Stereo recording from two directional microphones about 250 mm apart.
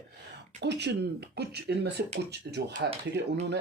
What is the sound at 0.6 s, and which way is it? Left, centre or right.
Speech, right.